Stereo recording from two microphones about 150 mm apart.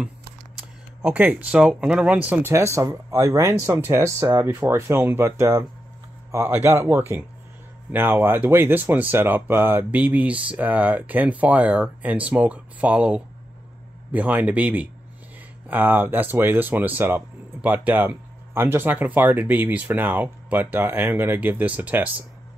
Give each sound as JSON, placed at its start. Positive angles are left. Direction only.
{"t": 0.6, "sound": "speech", "side_deg": -10}